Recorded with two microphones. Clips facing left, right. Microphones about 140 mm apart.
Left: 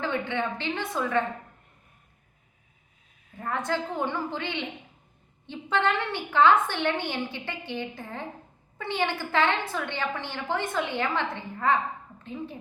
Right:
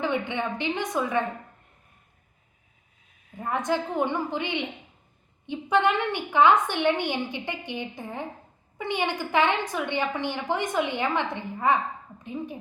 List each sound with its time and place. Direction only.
0.0 s a woman's voice: 15° right (ahead or behind)
3.3 s a woman's voice: 15° right (ahead or behind)